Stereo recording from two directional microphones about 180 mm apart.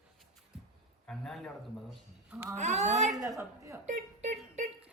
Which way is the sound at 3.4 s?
15° right (ahead or behind).